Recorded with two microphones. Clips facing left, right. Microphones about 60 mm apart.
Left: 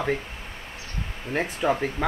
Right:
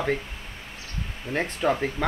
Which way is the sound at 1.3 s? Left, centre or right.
Centre.